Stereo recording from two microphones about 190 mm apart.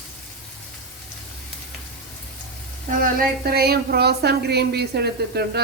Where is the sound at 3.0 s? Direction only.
50° right (ahead or behind).